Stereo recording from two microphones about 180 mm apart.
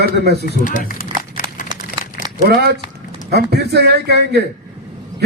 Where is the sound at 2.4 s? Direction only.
65° right (ahead or behind).